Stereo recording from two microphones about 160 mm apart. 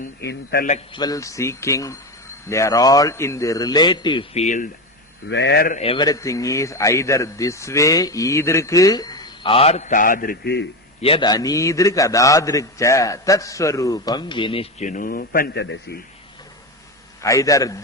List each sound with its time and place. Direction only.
0.2 s a man's voice: 80° left
0.9 s speech: 25° left (ahead or behind)
4.4 s speech: 50° left (ahead or behind)
5.4 s a man's voice: 85° left
5.8 s a man's voice: 35° left (ahead or behind)
6.1 s speech: 20° left (ahead or behind); by 10.7 s 90° left
11.0 s a man's voice: 35° left (ahead or behind)
11.3 s speech: 20° left (ahead or behind)
14.8 s a man's voice: 60° left (ahead or behind); by 16.0 s 90° left
17.2 s speech: 20° left (ahead or behind)